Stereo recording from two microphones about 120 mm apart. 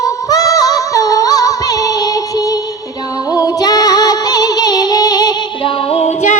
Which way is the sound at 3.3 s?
30° left (ahead or behind).